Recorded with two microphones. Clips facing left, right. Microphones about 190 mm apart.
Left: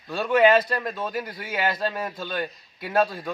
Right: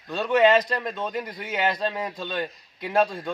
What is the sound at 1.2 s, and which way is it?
Speech, 20° right (ahead or behind).